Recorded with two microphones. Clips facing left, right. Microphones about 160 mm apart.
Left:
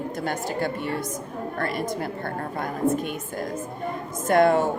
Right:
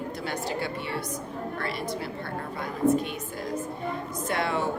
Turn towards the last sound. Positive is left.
turn(degrees=45)  # may be behind; listen again after turning